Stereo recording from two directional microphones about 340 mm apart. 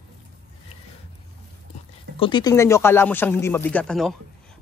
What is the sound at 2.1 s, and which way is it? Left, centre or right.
Speech, centre.